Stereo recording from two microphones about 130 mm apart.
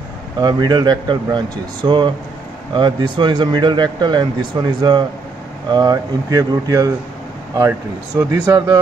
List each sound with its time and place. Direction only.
0.4 s speech: 30° right (ahead or behind)
8.2 s speech: 25° right (ahead or behind)